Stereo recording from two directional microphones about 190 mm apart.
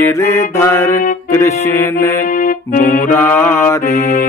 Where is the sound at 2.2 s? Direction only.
45° left (ahead or behind).